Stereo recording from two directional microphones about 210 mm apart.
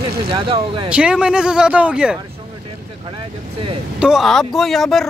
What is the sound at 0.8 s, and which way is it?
Speech, 5° right (ahead or behind).